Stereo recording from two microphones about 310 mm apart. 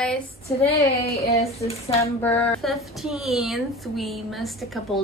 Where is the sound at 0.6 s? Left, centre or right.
Centre.